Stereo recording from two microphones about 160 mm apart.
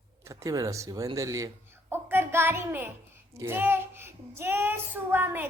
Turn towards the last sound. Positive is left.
turn(degrees=-15)  # may be behind; listen again after turning